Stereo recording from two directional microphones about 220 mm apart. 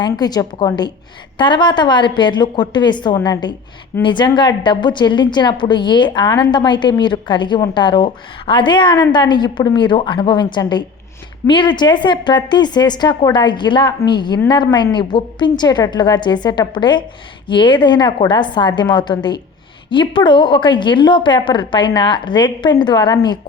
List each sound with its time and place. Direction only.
0.0 s a woman's voice: 20° left (ahead or behind)